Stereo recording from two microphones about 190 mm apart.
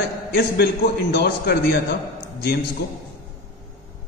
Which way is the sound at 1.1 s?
60° left (ahead or behind).